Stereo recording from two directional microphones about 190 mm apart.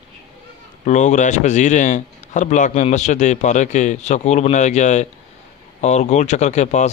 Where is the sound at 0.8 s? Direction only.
40° left (ahead or behind).